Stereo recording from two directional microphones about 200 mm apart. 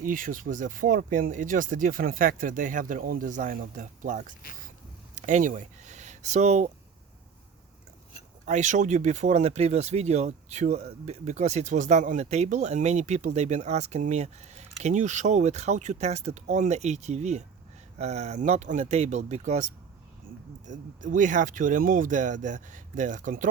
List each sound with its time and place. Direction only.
0.0 s speech: 40° right (ahead or behind)
5.1 s a sound: 40° right (ahead or behind)
8.4 s speech: 35° right (ahead or behind)
20.7 s speech: 40° right (ahead or behind)